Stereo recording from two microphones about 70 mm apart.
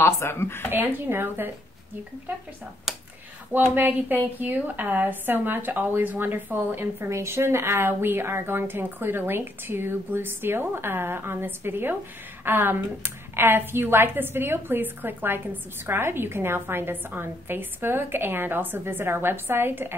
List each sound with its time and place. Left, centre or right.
0.0 s speech: left
0.7 s a woman's voice: right
3.7 s a woman's voice: right